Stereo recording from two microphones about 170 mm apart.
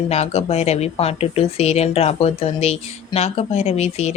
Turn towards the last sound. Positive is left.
turn(degrees=40)  # may be behind; listen again after turning